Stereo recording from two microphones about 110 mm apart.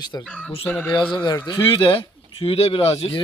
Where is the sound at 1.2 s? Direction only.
40° left (ahead or behind).